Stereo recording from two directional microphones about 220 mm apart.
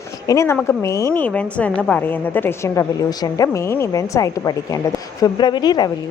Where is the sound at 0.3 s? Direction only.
10° left (ahead or behind).